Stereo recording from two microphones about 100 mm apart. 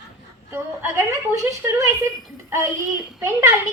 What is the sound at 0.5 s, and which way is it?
A woman's voice, 20° right (ahead or behind).